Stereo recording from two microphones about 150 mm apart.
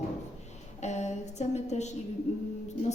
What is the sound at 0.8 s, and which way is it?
A woman's voice, 50° left (ahead or behind).